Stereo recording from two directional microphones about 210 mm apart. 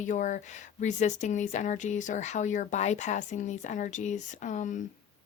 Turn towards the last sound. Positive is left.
turn(degrees=35)  # may be behind; listen again after turning